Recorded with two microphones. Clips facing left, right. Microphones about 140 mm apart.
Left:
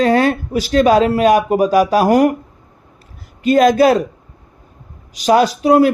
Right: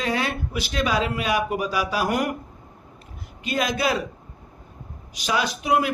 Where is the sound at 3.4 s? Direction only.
45° left (ahead or behind).